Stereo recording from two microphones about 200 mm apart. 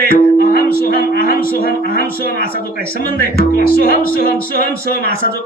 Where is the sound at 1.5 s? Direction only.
45° left (ahead or behind).